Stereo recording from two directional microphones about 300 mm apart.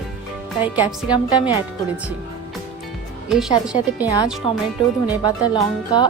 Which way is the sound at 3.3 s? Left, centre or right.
Centre.